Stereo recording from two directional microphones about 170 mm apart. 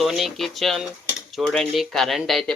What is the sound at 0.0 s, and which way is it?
Speech, centre (ahead or behind).